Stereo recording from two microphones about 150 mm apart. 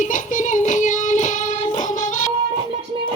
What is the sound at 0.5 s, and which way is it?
Music, 55° left (ahead or behind).